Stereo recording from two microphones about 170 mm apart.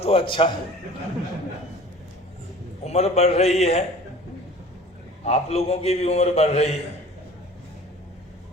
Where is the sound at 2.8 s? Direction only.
40° left (ahead or behind).